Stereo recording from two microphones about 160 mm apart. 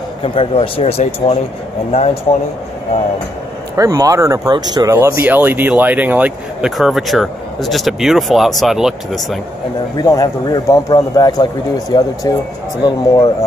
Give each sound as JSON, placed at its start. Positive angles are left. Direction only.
{"t": 0.2, "sound": "speech", "side_deg": 35}
{"t": 3.7, "sound": "speech", "side_deg": -20}
{"t": 4.9, "sound": "speech", "side_deg": -15}
{"t": 9.9, "sound": "a man's voice", "side_deg": 25}